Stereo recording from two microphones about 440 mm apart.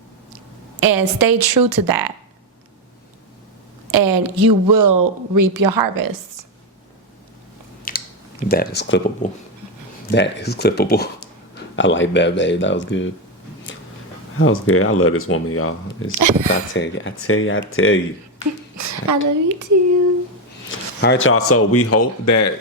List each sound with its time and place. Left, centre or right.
0.8 s speech: right
3.9 s speech: right
7.9 s speech: centre
14.3 s speech: left
16.1 s speech: right
16.5 s speech: left
18.8 s speech: right
20.7 s speech: left